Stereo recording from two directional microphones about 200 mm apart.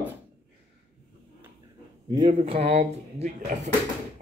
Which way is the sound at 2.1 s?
25° right (ahead or behind).